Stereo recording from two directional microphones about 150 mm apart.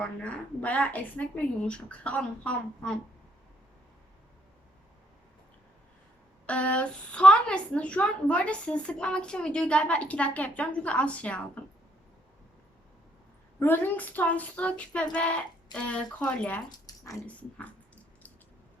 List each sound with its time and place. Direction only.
0.0 s a woman's voice: 10° left (ahead or behind)
6.4 s a woman's voice: 10° left (ahead or behind)
13.6 s a woman's voice: 15° left (ahead or behind)
16.6 s speech: 25° left (ahead or behind)
17.2 s a sound: 10° left (ahead or behind)